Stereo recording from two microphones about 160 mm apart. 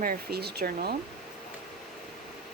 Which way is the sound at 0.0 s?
70° right (ahead or behind).